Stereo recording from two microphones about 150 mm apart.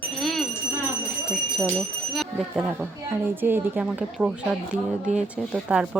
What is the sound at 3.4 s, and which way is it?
Speech, 10° right (ahead or behind).